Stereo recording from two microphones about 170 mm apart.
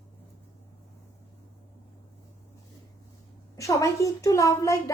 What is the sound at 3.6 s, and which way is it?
Speech, 20° left (ahead or behind).